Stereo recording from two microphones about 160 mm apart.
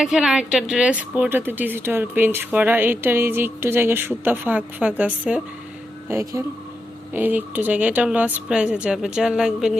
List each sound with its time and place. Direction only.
0.0 s a woman's voice: 5° right (ahead or behind)